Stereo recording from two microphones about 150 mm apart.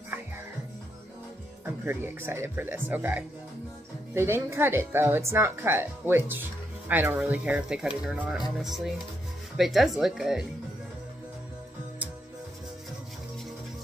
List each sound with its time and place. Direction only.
1.9 s speech: 15° right (ahead or behind)